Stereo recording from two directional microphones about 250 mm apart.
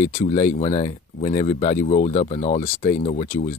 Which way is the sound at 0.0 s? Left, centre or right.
Left.